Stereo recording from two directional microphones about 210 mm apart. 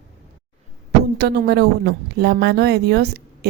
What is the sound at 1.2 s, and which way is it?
Speech, 50° right (ahead or behind).